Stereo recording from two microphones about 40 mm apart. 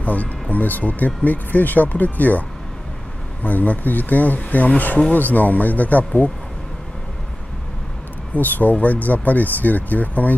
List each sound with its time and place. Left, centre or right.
0.0 s speech: left
3.4 s speech: left
8.4 s speech: left